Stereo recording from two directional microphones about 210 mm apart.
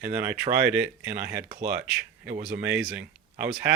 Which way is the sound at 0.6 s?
5° right (ahead or behind).